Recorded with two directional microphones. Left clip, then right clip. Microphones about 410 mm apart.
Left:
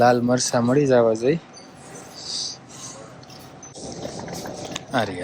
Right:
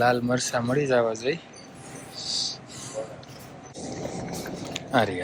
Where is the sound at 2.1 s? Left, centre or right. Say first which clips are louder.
Right 1 dB; centre.